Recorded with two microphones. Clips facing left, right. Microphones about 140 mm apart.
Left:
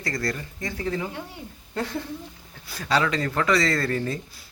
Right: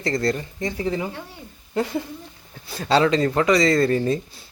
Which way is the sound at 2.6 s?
25° right (ahead or behind).